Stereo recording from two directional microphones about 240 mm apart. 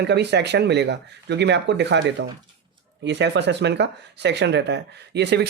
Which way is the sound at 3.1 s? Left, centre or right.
Right.